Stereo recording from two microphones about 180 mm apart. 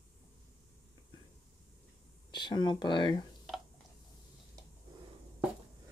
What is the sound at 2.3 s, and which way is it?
Speech, 25° left (ahead or behind).